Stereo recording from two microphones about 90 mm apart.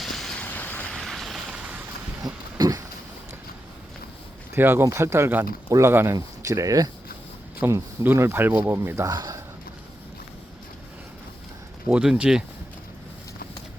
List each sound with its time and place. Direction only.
0.0 s vehicle: 5° left (ahead or behind)
0.4 s vehicle: 20° left (ahead or behind)
0.9 s vehicle: centre (ahead or behind)
2.2 s a sound: 45° right (ahead or behind)
4.5 s speech: 25° right (ahead or behind)
6.1 s speech: 40° right (ahead or behind)
7.6 s speech: 25° right (ahead or behind)
9.0 s a man's voice: 45° right (ahead or behind)
11.9 s speech: 10° right (ahead or behind)